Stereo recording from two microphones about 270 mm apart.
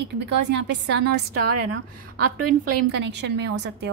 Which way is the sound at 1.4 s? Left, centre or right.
Right.